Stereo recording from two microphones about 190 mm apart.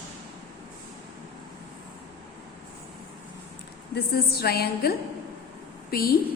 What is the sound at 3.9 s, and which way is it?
A woman's voice, 55° left (ahead or behind).